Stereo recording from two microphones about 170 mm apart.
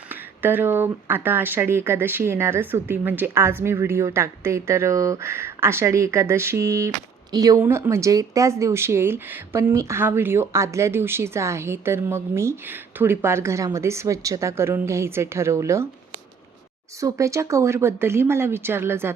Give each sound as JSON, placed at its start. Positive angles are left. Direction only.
{"t": 0.1, "sound": "speech", "side_deg": -10}
{"t": 17.0, "sound": "speech", "side_deg": -20}